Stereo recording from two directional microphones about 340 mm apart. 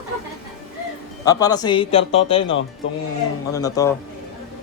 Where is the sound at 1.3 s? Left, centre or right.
Centre.